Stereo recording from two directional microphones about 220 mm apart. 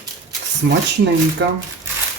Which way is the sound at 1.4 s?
55° right (ahead or behind).